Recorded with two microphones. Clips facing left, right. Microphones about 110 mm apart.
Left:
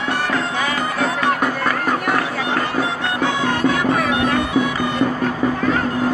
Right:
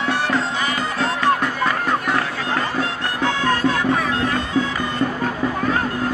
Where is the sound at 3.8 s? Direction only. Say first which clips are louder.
Left 2 dB; 70° left (ahead or behind).